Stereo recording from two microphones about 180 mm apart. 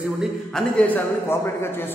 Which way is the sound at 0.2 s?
Centre (ahead or behind).